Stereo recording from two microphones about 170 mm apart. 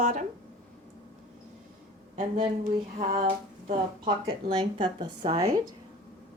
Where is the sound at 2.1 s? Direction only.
45° right (ahead or behind).